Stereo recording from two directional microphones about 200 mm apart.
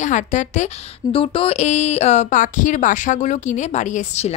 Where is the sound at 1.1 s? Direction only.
25° left (ahead or behind).